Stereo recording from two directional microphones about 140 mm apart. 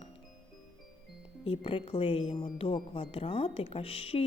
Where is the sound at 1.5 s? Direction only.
40° left (ahead or behind).